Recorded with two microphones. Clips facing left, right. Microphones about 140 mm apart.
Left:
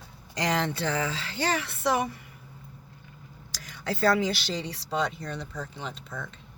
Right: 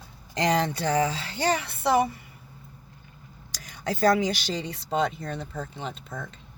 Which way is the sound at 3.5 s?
45° right (ahead or behind).